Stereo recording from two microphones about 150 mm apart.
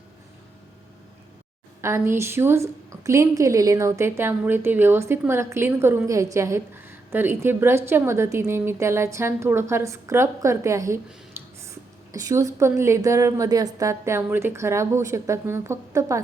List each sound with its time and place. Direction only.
1.8 s a woman's voice: 20° right (ahead or behind)